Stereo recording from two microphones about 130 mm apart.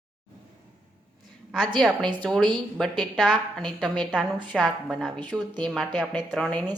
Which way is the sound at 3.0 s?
5° left (ahead or behind).